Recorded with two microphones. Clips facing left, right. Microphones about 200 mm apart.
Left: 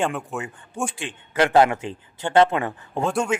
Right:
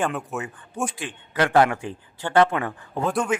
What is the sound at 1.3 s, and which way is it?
Speech, 25° left (ahead or behind).